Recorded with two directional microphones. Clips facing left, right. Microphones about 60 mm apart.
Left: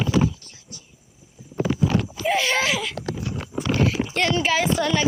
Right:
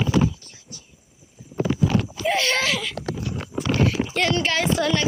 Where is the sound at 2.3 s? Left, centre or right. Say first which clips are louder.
Left 1 dB; centre.